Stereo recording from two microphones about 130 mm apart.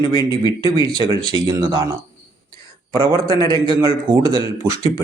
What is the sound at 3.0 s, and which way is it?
Speech, 30° right (ahead or behind).